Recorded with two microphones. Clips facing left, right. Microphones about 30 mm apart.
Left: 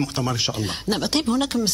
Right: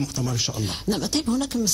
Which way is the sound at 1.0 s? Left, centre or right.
Left.